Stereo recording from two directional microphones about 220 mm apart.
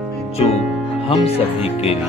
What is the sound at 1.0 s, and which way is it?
Music, 25° left (ahead or behind).